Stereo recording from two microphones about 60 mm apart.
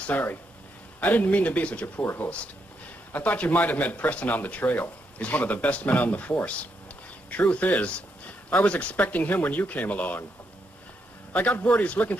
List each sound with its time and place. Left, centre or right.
0.0 s speech: left
2.0 s speech: left
11.3 s speech: left